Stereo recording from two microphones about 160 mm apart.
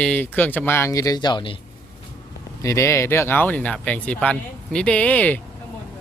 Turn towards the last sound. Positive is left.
turn(degrees=10)  # may be behind; listen again after turning